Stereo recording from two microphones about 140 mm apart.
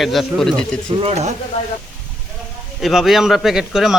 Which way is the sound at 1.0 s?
55° right (ahead or behind).